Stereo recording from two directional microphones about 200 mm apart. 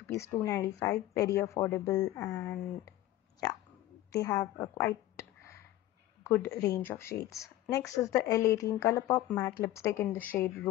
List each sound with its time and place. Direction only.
0.1 s a woman's voice: 15° left (ahead or behind)
4.1 s a woman's voice: 15° left (ahead or behind)